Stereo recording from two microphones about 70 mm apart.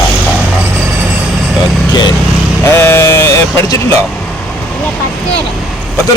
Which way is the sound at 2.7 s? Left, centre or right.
Left.